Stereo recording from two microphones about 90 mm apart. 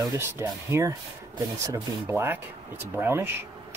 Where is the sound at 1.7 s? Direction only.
30° right (ahead or behind).